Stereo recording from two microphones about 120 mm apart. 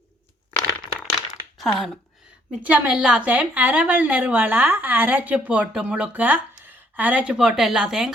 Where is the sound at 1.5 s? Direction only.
Centre (ahead or behind).